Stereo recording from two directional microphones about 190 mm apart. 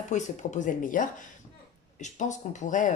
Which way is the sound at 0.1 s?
40° left (ahead or behind).